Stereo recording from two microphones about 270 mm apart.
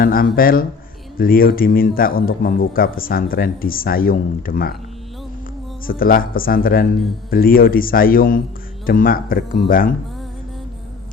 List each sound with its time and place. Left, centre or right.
0.0 s speech: left
5.8 s speech: left